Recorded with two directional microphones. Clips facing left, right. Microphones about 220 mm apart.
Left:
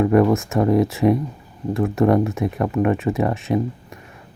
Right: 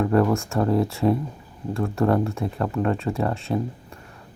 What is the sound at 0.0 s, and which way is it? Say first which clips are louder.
Speech: left 4 dB; 15° left (ahead or behind).